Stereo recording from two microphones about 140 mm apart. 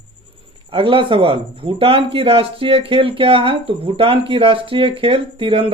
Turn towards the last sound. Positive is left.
turn(degrees=-40)  # may be behind; listen again after turning